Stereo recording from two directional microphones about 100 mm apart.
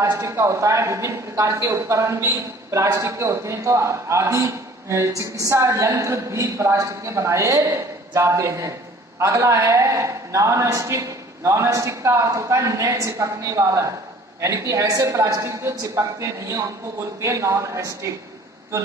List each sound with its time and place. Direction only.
0.0 s a man's voice: 30° right (ahead or behind)